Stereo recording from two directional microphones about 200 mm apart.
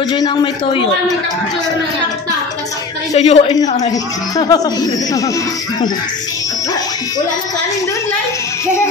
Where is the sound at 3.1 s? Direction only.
30° left (ahead or behind).